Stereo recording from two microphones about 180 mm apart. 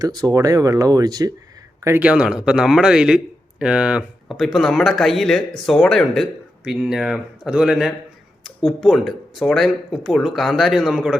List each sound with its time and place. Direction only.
0.0 s speech: 20° right (ahead or behind)
1.8 s speech: 10° right (ahead or behind)